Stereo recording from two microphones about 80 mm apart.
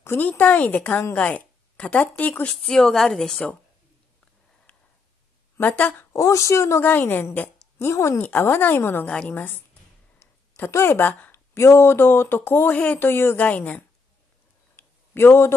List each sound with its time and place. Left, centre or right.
0.0 s a woman's voice: left
2.6 s a woman's voice: centre
5.6 s a woman's voice: left
6.1 s speech: left
6.9 s a woman's voice: left
7.8 s speech: left
8.2 s a woman's voice: left
9.0 s a woman's voice: centre
10.6 s speech: left
11.5 s a woman's voice: left
14.8 s a sound: left